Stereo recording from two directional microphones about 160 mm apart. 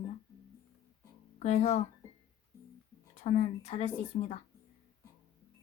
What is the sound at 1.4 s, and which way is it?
Speech, 45° left (ahead or behind).